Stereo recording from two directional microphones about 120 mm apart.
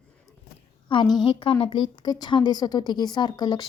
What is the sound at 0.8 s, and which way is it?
A woman's voice, 45° left (ahead or behind).